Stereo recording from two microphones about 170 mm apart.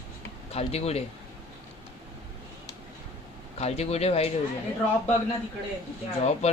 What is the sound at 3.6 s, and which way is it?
Speech, 40° left (ahead or behind).